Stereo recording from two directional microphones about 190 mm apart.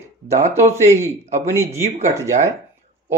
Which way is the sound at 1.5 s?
15° right (ahead or behind).